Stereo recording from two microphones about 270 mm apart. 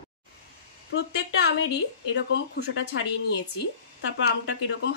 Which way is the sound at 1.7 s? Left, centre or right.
Left.